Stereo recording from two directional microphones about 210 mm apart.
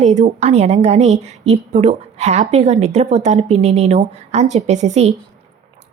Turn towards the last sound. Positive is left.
turn(degrees=-35)  # may be behind; listen again after turning